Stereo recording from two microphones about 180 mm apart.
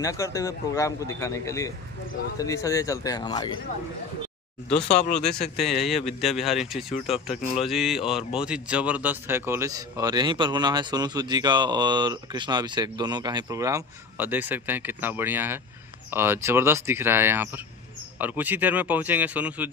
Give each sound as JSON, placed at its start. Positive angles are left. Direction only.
{"t": 0.0, "sound": "a man's voice", "side_deg": 20}
{"t": 5.1, "sound": "speech", "side_deg": 5}